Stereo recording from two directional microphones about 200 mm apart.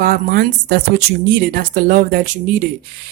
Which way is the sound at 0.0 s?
45° right (ahead or behind).